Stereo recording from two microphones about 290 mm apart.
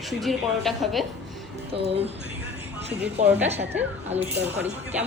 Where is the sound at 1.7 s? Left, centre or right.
Centre.